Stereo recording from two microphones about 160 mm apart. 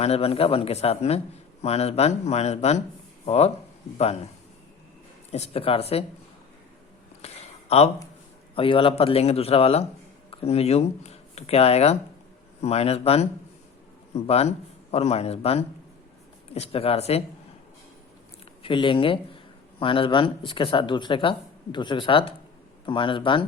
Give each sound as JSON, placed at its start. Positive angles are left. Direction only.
{"t": 0.0, "sound": "speech", "side_deg": 40}
{"t": 5.3, "sound": "speech", "side_deg": 40}
{"t": 7.2, "sound": "a sound", "side_deg": 40}
{"t": 8.5, "sound": "speech", "side_deg": 35}
{"t": 18.6, "sound": "speech", "side_deg": 30}